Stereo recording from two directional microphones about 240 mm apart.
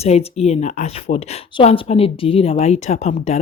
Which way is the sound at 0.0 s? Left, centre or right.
Left.